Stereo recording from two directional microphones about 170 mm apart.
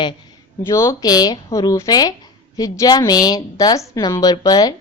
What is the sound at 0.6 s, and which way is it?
Speech, 15° left (ahead or behind).